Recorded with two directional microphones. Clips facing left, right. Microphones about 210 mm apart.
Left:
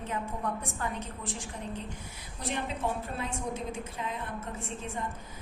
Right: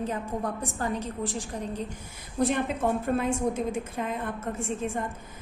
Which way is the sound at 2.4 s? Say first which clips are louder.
Right 8 dB; 50° right (ahead or behind).